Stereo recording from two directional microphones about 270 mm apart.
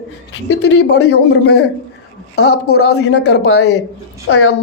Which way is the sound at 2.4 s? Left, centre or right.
Left.